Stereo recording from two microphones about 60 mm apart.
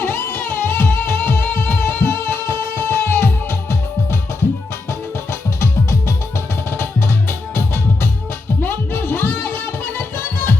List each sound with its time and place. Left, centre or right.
0.0 s music: left
5.3 s music: left
7.3 s music: left